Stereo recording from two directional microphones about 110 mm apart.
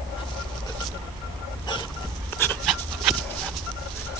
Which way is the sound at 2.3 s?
20° left (ahead or behind).